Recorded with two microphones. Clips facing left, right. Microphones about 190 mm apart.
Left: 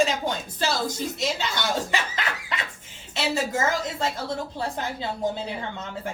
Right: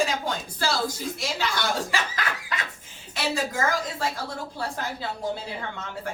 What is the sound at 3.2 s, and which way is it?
Speech, 25° left (ahead or behind).